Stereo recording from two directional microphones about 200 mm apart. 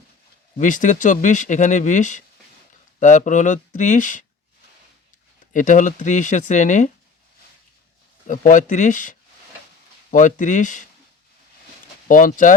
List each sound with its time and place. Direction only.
0.6 s speech: 40° left (ahead or behind)
5.5 s speech: 40° left (ahead or behind)
8.3 s speech: 40° left (ahead or behind)
12.0 s speech: 40° left (ahead or behind)